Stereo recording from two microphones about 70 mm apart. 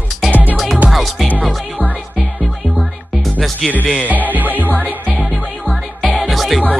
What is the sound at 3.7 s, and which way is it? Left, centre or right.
Music, left.